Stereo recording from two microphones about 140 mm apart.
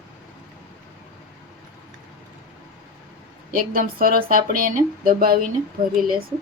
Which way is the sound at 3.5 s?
90° right.